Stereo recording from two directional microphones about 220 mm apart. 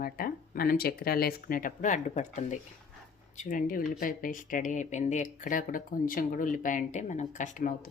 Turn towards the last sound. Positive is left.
turn(degrees=35)  # may be behind; listen again after turning